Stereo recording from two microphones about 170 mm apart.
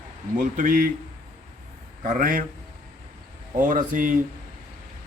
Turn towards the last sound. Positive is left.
turn(degrees=-50)  # may be behind; listen again after turning